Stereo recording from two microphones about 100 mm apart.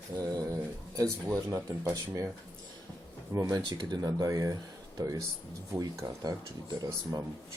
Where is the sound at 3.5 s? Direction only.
40° right (ahead or behind).